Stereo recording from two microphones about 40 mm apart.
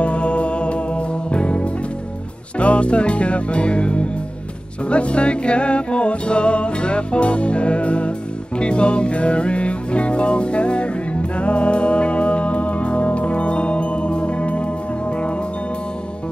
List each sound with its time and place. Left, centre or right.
0.0 s music: left